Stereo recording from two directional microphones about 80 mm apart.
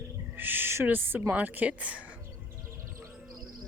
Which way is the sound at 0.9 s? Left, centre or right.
Right.